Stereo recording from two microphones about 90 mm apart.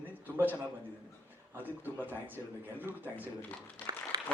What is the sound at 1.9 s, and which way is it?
Speech, 20° right (ahead or behind).